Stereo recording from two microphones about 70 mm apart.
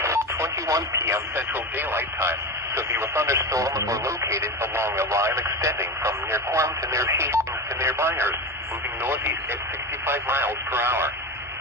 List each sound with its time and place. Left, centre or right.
0.0 s speech: right
1.5 s speech: right